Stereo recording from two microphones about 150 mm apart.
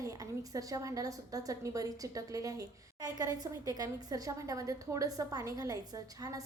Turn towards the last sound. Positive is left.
turn(degrees=-25)  # may be behind; listen again after turning